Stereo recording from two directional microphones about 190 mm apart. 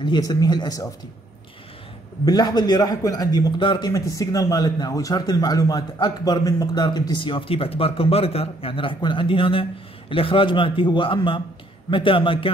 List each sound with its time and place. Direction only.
0.0 s a man's voice: 20° left (ahead or behind)
2.2 s a man's voice: 20° left (ahead or behind)